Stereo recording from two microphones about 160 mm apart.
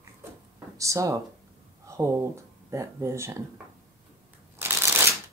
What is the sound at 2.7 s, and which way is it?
Speech, 15° right (ahead or behind).